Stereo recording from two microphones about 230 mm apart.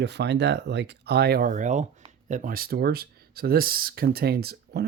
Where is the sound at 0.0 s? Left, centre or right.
Right.